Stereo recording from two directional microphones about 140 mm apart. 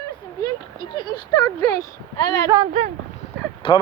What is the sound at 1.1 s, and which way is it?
Speech, 30° left (ahead or behind).